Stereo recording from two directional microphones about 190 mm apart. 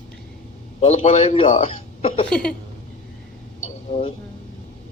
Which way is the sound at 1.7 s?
30° left (ahead or behind).